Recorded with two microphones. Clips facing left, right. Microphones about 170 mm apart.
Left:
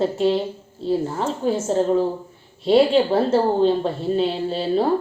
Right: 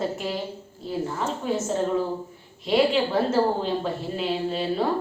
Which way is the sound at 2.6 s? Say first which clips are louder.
Left 6 dB; 30° left (ahead or behind).